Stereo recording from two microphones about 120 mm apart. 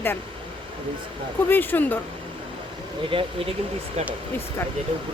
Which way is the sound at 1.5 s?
15° left (ahead or behind).